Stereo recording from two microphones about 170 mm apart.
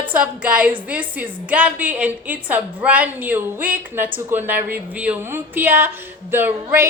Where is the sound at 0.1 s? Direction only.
10° right (ahead or behind).